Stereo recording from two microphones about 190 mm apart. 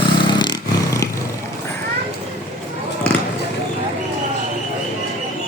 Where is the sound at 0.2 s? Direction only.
25° left (ahead or behind).